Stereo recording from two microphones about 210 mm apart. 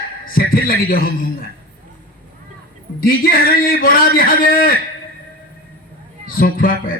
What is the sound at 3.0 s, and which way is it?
A man's voice, 45° left (ahead or behind).